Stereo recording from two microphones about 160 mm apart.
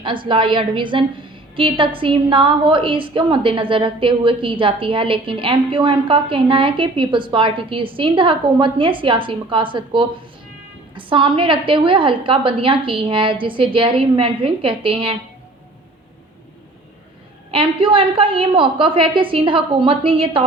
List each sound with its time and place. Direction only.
0.0 s a woman's voice: 30° right (ahead or behind)
17.5 s a woman's voice: 35° right (ahead or behind)